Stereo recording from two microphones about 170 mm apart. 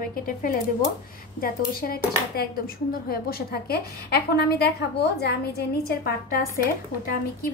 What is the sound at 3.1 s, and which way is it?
A woman's voice, 65° left (ahead or behind).